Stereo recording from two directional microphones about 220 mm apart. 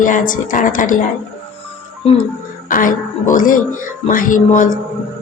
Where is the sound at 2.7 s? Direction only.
40° left (ahead or behind).